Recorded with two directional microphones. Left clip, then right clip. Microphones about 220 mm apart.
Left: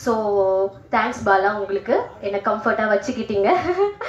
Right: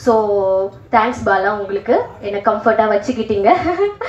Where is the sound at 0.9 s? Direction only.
50° left (ahead or behind).